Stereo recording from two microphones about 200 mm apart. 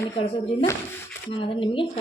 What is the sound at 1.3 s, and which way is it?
Speech, 25° left (ahead or behind).